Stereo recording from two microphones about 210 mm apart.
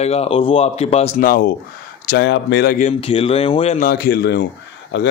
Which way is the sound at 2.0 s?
55° left (ahead or behind).